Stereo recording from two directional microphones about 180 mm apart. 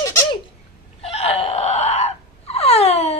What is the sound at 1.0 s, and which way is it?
Wail, 35° left (ahead or behind).